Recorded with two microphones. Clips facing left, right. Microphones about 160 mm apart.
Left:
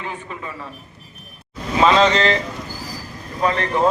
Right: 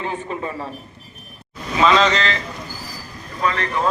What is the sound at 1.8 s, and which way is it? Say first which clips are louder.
Speech: left 2 dB; 30° left (ahead or behind).